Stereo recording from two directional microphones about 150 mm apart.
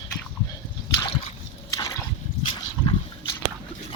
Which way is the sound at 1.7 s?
25° left (ahead or behind).